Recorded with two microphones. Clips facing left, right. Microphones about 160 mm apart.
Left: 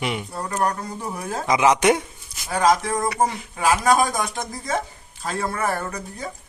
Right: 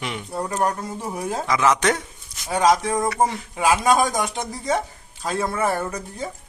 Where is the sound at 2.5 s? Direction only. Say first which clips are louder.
Right 1 dB; 15° right (ahead or behind).